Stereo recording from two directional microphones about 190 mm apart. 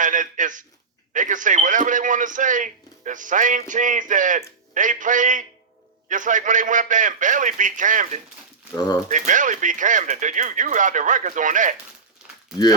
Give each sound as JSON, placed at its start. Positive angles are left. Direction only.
{"t": 0.0, "sound": "speech", "side_deg": -45}